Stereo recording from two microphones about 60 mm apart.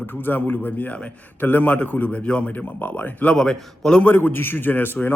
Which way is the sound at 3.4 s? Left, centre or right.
Centre.